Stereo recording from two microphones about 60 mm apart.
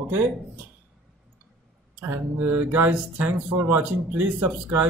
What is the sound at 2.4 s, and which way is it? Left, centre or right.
Speech, right.